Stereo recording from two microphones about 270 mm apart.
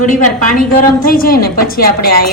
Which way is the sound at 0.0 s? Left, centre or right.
Left.